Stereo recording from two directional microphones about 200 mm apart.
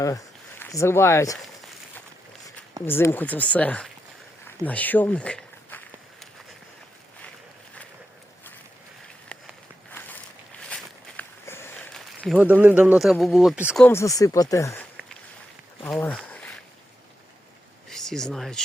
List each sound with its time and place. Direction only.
0.0 s speech: 15° left (ahead or behind)
2.8 s speech: 10° left (ahead or behind)
4.4 s walk: 10° left (ahead or behind)
11.2 s a sound: 10° left (ahead or behind)
11.9 s speech: centre (ahead or behind)
13.8 s speech: 15° left (ahead or behind)
15.9 s speech: 5° left (ahead or behind)
17.9 s speech: 5° left (ahead or behind)